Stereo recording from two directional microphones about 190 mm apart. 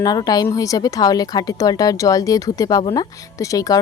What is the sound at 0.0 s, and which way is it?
A woman's voice, 20° left (ahead or behind).